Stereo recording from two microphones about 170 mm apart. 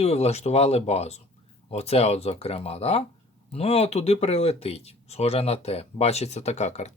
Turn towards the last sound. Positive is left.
turn(degrees=40)  # may be behind; listen again after turning